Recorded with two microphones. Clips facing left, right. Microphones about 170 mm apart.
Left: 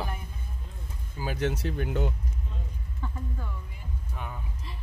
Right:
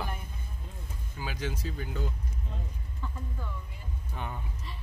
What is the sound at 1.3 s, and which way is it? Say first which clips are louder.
Speech: left 7 dB; 65° left (ahead or behind).